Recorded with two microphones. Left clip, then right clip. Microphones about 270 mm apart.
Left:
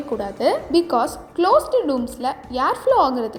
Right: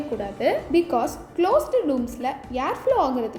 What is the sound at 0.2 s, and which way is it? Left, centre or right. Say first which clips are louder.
Speech: left 3 dB; centre.